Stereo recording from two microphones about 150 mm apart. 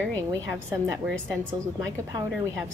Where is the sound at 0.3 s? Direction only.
20° right (ahead or behind).